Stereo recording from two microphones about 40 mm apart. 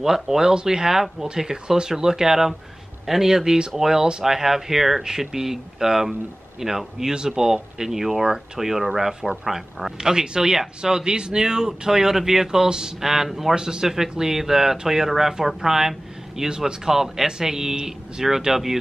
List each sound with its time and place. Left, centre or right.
0.0 s speech: centre